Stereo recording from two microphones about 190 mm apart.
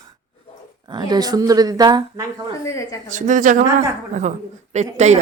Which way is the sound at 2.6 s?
15° left (ahead or behind).